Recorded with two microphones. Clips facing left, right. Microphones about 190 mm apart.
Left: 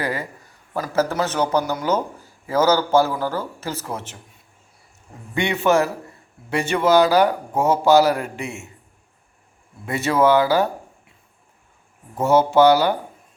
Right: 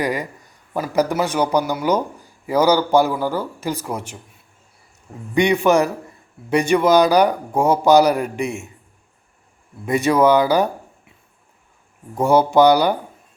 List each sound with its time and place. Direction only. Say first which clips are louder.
0.0 s speech: right 3 dB; 15° right (ahead or behind)
5.3 s speech: right 3 dB; 15° right (ahead or behind)
9.8 s speech: right 3 dB; 15° right (ahead or behind)
12.1 s speech: right 1 dB; 15° right (ahead or behind)